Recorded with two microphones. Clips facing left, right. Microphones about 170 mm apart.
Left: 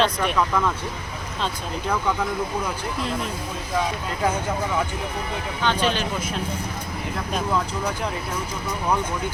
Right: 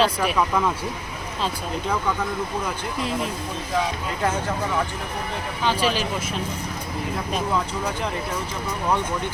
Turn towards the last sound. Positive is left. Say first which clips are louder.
# even
turn(degrees=0)  # may be behind; listen again after turning